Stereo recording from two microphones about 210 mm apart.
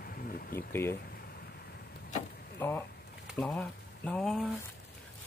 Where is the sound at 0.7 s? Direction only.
10° left (ahead or behind).